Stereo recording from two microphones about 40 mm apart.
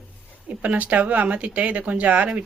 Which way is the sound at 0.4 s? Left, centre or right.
Right.